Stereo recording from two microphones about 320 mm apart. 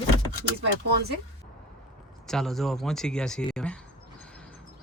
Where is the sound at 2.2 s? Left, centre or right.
Centre.